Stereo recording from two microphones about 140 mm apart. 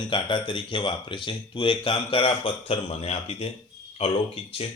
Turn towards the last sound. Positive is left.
turn(degrees=45)  # may be behind; listen again after turning